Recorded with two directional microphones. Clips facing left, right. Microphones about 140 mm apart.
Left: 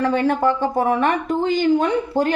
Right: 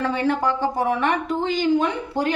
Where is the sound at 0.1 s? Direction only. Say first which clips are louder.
Left 4 dB; 50° left (ahead or behind).